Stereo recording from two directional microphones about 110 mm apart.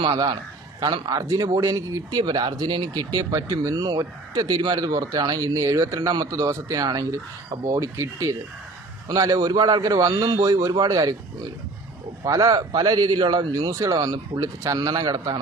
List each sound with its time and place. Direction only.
0.0 s a man's voice: 45° right (ahead or behind)
1.2 s speech: 30° right (ahead or behind)
12.2 s speech: 30° right (ahead or behind)
13.7 s speech: 30° right (ahead or behind)